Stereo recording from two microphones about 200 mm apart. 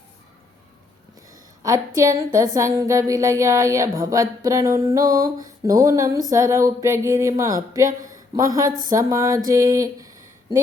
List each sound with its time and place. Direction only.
1.3 s a woman's voice: 15° right (ahead or behind)